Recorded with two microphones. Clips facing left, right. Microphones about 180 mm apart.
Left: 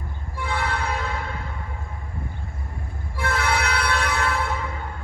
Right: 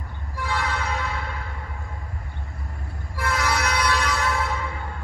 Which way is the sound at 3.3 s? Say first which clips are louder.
Left 1 dB; 60° left (ahead or behind).